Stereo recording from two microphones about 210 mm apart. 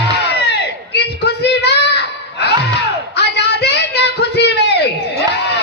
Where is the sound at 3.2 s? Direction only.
55° left (ahead or behind).